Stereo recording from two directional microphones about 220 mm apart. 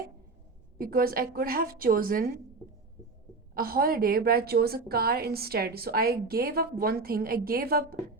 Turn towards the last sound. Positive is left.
turn(degrees=-45)  # may be behind; listen again after turning